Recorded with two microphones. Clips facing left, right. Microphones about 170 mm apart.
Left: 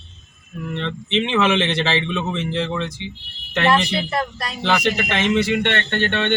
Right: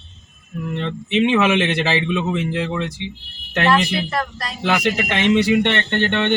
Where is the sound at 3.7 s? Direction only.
15° left (ahead or behind).